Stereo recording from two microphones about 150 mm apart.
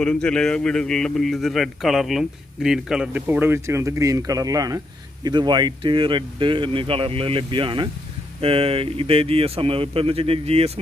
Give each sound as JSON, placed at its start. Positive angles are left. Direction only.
{"t": 0.0, "sound": "speech", "side_deg": 5}